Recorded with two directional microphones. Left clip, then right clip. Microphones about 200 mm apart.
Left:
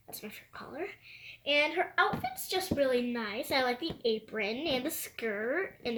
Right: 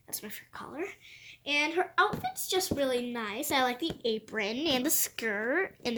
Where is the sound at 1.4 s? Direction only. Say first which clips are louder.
Even; 30° right (ahead or behind).